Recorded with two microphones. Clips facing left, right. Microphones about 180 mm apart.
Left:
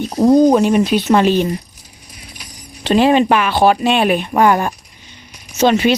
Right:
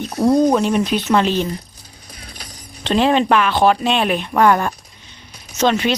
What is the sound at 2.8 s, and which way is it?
Speech, 5° left (ahead or behind).